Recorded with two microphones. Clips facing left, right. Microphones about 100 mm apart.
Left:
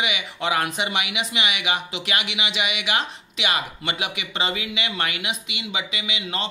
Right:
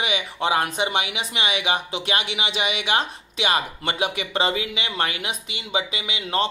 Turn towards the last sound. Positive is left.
turn(degrees=-35)  # may be behind; listen again after turning